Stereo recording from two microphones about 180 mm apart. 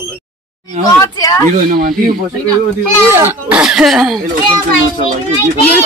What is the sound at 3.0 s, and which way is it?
Speech, 15° right (ahead or behind).